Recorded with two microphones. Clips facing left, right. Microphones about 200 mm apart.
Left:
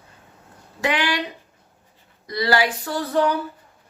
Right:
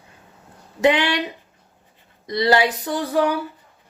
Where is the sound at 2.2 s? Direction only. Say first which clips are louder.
Right 3 dB; 20° right (ahead or behind).